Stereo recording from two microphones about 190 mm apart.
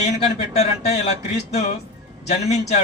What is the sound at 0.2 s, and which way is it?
A man's voice, 35° left (ahead or behind).